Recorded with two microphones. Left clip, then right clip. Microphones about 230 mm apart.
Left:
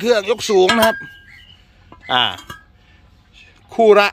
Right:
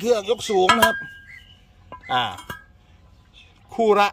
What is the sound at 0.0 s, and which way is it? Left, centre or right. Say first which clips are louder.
Music: left 5 dB; centre.